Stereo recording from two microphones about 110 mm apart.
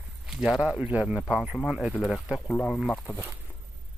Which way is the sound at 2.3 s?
15° left (ahead or behind).